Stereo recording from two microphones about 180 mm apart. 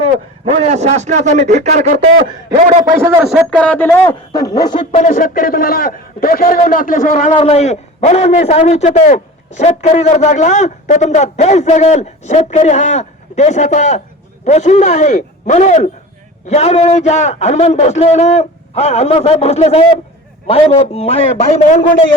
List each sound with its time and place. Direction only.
0.5 s speech: 35° right (ahead or behind)
2.9 s speech: 15° right (ahead or behind)
3.5 s speech: 5° left (ahead or behind); by 4.9 s 25° left (ahead or behind)
4.9 s a man's voice: 45° left (ahead or behind)
7.3 s a man's voice: 35° left (ahead or behind)